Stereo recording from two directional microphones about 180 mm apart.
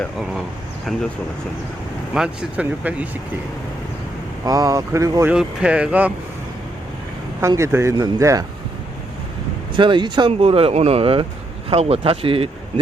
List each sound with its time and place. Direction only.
0.0 s speech: centre (ahead or behind)
2.1 s speech: 5° right (ahead or behind)
4.4 s speech: 20° right (ahead or behind)
5.3 s speech: 5° right (ahead or behind)
7.4 s speech: 15° right (ahead or behind)
9.7 s speech: 25° right (ahead or behind)